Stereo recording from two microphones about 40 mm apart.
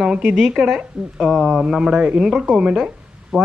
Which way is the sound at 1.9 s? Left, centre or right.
Right.